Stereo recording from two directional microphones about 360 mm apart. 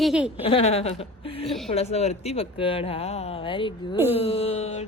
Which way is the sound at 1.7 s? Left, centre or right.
Centre.